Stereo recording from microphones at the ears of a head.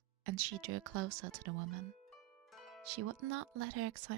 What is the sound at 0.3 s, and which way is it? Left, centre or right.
Speech, right.